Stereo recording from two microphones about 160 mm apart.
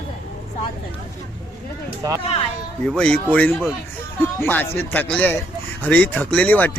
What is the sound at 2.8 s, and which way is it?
Speech, 5° left (ahead or behind).